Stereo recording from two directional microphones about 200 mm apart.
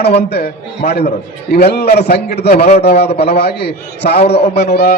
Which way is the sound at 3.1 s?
55° left (ahead or behind).